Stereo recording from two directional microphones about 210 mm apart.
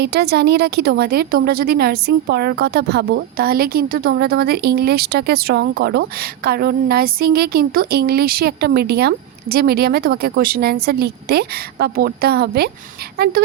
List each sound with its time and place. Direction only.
0.0 s a woman's voice: 50° right (ahead or behind)